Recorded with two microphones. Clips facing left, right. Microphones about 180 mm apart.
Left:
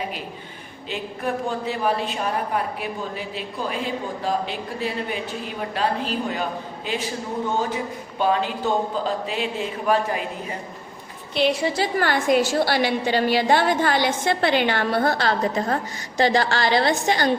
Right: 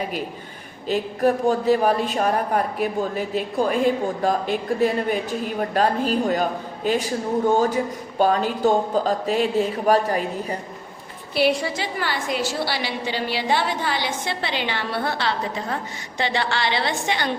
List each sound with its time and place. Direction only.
0.9 s a man's voice: 40° right (ahead or behind)
8.2 s speech: 45° right (ahead or behind)
11.6 s a woman's voice: 35° left (ahead or behind)
11.9 s a woman's voice: 50° left (ahead or behind)